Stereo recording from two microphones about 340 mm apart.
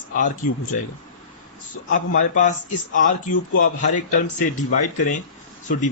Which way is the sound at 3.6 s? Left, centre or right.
Left.